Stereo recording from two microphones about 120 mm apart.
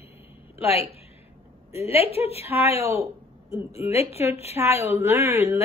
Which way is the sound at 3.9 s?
60° left (ahead or behind).